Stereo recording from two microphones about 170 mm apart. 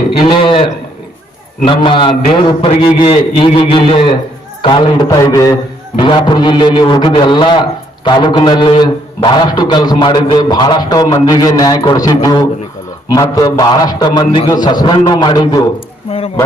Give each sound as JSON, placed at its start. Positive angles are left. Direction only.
{"t": 0.2, "sound": "a man's voice", "side_deg": 30}
{"t": 5.0, "sound": "a man's voice", "side_deg": 20}